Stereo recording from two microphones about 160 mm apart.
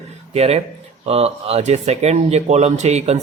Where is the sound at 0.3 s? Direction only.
40° right (ahead or behind).